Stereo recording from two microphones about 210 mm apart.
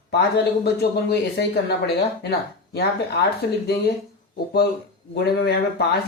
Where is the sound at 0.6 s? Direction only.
50° left (ahead or behind).